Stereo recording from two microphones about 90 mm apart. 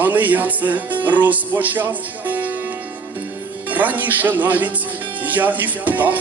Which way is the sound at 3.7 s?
20° right (ahead or behind).